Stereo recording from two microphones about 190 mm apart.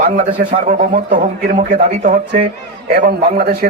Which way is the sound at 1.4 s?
40° right (ahead or behind).